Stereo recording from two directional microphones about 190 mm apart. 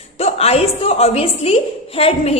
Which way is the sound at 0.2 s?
35° left (ahead or behind).